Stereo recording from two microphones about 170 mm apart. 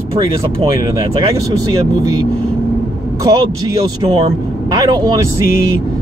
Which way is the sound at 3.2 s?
20° right (ahead or behind).